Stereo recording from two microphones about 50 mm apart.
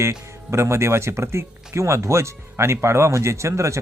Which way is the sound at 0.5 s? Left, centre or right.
Right.